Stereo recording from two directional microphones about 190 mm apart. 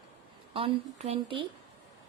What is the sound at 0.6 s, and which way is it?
Speech, 30° right (ahead or behind).